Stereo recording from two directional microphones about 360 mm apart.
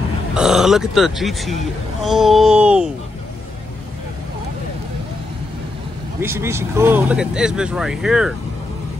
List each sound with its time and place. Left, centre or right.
0.3 s speech: centre
6.2 s speech: centre